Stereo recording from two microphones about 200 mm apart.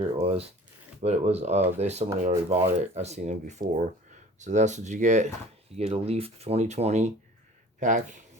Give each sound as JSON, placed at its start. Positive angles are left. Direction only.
{"t": 0.2, "sound": "speech", "side_deg": -30}